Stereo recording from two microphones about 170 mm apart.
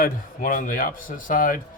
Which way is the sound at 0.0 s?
50° left (ahead or behind).